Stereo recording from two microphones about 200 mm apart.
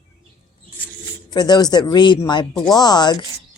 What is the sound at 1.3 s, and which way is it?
Speech, 20° left (ahead or behind).